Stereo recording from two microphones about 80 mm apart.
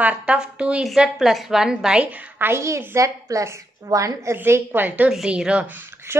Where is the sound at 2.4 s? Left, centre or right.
Right.